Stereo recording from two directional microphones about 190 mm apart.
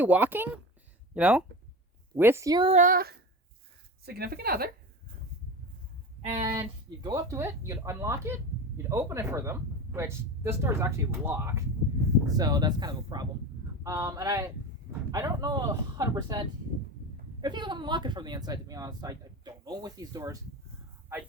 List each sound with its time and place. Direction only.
0.0 s speech: 10° right (ahead or behind)
2.6 s speech: 40° right (ahead or behind)
6.2 s speech: 35° right (ahead or behind)
6.5 s speech: 15° right (ahead or behind)